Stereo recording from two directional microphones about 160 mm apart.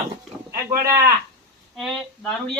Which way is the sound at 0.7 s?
15° right (ahead or behind).